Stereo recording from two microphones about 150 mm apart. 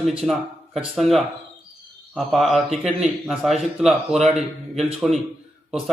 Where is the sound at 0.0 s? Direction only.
Centre (ahead or behind).